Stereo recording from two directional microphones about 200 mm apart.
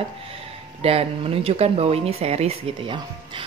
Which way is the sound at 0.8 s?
30° right (ahead or behind).